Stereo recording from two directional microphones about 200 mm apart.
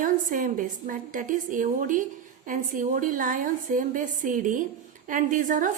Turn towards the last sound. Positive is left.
turn(degrees=-40)  # may be behind; listen again after turning